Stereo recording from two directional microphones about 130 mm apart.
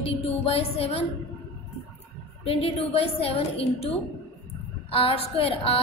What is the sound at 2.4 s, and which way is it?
A woman's voice, 45° left (ahead or behind).